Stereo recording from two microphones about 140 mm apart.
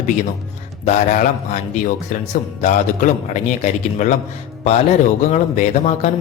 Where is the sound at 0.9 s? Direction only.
60° left (ahead or behind).